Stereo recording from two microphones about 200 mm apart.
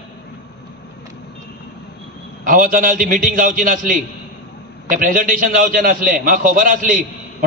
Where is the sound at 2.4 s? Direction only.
40° right (ahead or behind).